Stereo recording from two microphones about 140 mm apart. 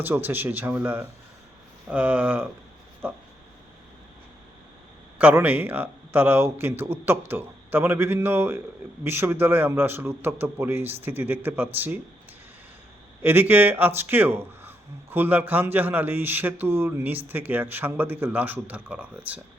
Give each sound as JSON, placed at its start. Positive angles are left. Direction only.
{"t": 0.0, "sound": "a man's voice", "side_deg": -15}
{"t": 5.1, "sound": "a man's voice", "side_deg": -10}
{"t": 13.2, "sound": "a man's voice", "side_deg": -15}